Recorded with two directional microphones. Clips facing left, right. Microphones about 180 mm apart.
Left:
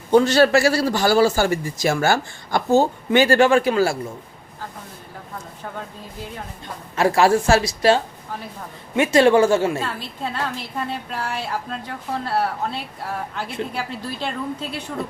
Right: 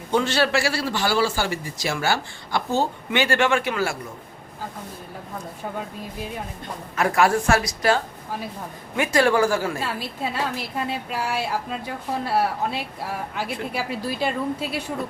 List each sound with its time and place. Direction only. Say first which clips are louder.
0.1 s a man's voice: left 7 dB; 40° left (ahead or behind)
6.9 s a woman's voice: left 3 dB; 30° left (ahead or behind)
9.8 s speech: even; 10° right (ahead or behind)